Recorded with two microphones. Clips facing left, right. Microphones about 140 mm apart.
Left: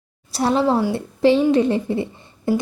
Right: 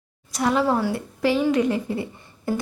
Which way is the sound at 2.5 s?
25° left (ahead or behind).